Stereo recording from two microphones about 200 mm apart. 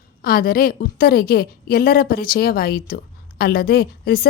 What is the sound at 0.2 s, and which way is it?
A woman's voice, 50° left (ahead or behind).